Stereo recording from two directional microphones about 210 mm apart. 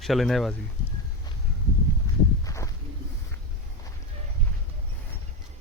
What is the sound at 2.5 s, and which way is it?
Walk, 15° left (ahead or behind).